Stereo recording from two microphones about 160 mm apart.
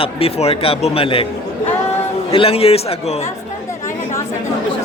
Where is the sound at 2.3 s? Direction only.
35° left (ahead or behind).